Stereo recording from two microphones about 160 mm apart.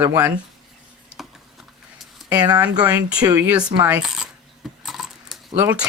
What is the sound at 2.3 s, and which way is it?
Speech, 25° right (ahead or behind).